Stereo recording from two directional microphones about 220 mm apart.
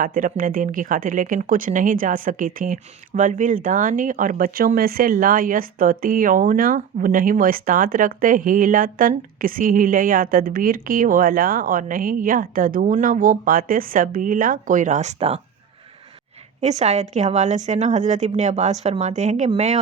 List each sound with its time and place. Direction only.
0.0 s speech: 40° right (ahead or behind)
16.6 s speech: 30° right (ahead or behind)